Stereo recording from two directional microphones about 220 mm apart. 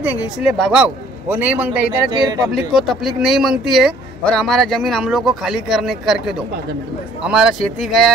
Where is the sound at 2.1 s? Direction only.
20° right (ahead or behind).